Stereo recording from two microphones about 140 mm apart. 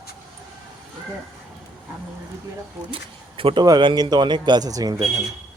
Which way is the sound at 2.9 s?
40° right (ahead or behind).